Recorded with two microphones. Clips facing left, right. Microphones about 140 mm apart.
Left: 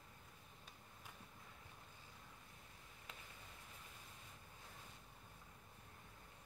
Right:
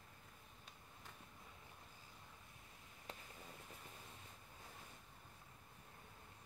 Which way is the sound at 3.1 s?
35° right (ahead or behind).